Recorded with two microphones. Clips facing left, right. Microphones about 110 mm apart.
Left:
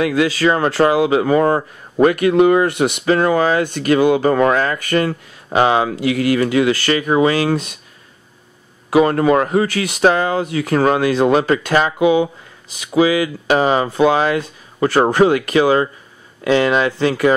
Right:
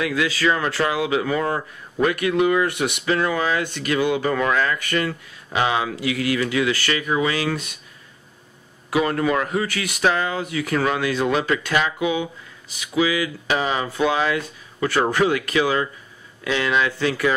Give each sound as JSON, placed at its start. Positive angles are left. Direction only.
{"t": 0.0, "sound": "a man's voice", "side_deg": 40}
{"t": 8.9, "sound": "a man's voice", "side_deg": 40}